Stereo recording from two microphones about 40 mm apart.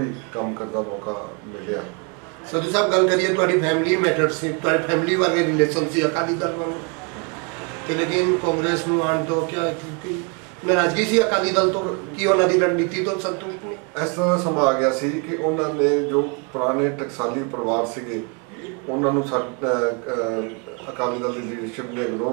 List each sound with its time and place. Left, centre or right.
0.0 s a man's voice: centre
2.5 s a man's voice: centre
7.8 s a man's voice: centre